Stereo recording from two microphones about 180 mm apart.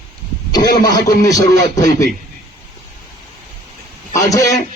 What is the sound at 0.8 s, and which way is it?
Speech, 20° left (ahead or behind).